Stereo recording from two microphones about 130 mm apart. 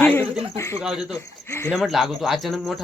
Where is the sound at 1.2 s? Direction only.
20° left (ahead or behind).